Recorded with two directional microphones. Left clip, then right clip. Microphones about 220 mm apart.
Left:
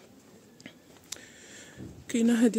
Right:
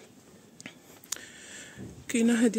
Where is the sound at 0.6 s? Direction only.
5° left (ahead or behind).